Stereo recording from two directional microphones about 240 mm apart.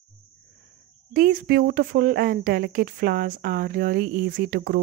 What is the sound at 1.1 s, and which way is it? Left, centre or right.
Speech, right.